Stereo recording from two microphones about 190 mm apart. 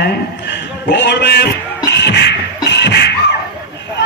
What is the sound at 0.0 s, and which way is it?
A man's voice, 65° left (ahead or behind).